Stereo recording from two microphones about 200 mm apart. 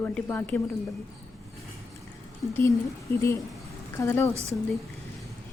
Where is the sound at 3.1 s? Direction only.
15° left (ahead or behind).